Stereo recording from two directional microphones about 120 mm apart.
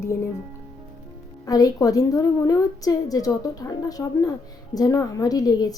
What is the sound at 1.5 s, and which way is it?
A woman's voice, 30° left (ahead or behind).